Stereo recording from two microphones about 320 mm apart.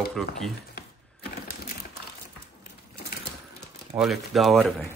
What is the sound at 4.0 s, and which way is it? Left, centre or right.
Speech, centre.